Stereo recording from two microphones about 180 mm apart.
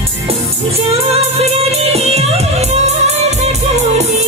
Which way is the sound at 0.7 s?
35° right (ahead or behind).